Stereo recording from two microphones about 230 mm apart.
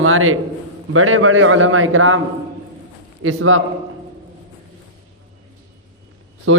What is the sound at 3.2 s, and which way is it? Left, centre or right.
Speech, right.